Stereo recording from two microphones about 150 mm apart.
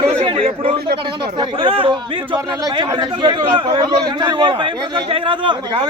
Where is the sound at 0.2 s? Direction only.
40° right (ahead or behind).